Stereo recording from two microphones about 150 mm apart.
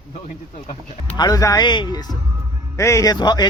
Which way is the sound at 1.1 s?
25° left (ahead or behind).